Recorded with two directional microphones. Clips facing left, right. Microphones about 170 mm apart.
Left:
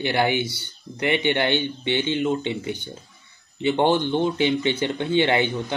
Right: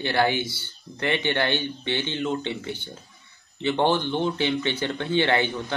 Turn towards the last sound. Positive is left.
turn(degrees=15)  # may be behind; listen again after turning